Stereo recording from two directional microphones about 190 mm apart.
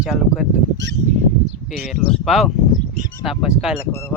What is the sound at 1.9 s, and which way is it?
Speech, centre (ahead or behind).